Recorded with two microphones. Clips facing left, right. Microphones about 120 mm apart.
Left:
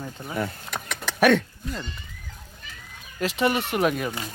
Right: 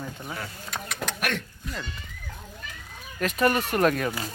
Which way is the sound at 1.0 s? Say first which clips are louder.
Right 1 dB; 90° right.